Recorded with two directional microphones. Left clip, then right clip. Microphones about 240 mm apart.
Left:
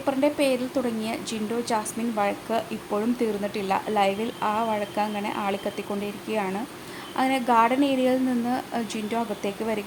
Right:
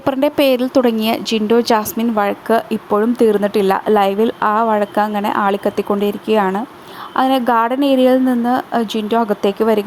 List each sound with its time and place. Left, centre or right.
0.0 s a woman's voice: right